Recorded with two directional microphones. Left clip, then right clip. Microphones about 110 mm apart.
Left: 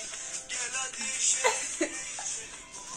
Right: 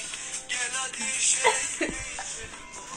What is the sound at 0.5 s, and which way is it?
Music, 40° left (ahead or behind).